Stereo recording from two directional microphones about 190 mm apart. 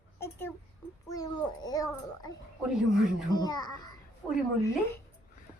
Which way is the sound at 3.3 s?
20° left (ahead or behind).